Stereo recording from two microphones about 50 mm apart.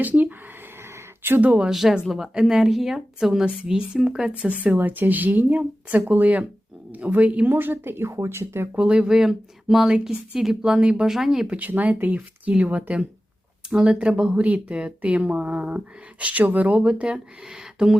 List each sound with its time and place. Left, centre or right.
0.0 s speech: right
1.5 s speech: right
1.7 s speech: centre
4.4 s speech: right
7.5 s a woman's voice: right
8.1 s speech: right
8.7 s speech: right
11.1 s speech: centre
11.4 s speech: right
16.2 s speech: right
16.8 s speech: centre